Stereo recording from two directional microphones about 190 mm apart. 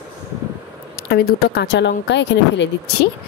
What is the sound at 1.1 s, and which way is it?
A woman's voice, 55° left (ahead or behind).